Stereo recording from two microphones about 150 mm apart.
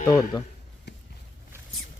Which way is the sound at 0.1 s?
25° left (ahead or behind).